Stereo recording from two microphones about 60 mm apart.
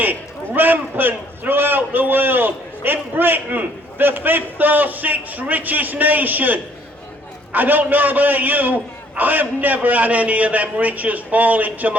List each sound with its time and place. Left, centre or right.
0.0 s a man's voice: right